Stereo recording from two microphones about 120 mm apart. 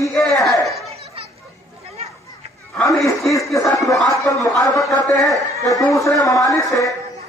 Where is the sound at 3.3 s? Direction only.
25° left (ahead or behind).